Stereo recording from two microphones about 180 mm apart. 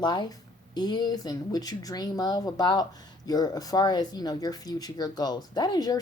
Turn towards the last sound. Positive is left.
turn(degrees=20)  # may be behind; listen again after turning